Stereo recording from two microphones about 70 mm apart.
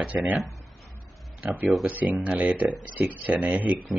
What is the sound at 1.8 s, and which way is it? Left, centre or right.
Speech, right.